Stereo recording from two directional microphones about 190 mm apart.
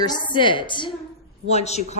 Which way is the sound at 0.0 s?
25° left (ahead or behind).